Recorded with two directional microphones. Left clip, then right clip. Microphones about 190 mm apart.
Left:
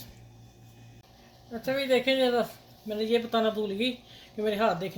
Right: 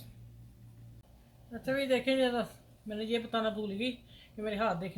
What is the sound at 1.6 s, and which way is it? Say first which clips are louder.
A woman's voice: left 5 dB; 40° left (ahead or behind).